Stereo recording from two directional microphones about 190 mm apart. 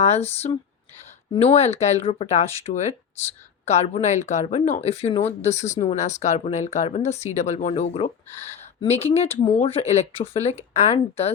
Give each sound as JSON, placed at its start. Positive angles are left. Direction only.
{"t": 0.0, "sound": "speech", "side_deg": 35}